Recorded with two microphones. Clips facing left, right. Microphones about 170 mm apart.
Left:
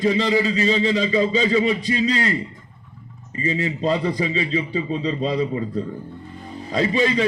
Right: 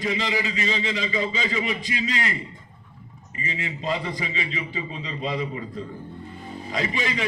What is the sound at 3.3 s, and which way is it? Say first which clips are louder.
A man's voice: left 9 dB; 35° left (ahead or behind).